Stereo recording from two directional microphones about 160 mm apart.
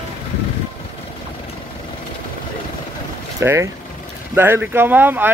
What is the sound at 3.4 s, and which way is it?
Speech, 15° right (ahead or behind).